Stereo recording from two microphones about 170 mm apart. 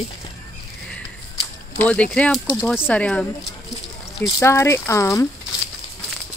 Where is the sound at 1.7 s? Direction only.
10° left (ahead or behind).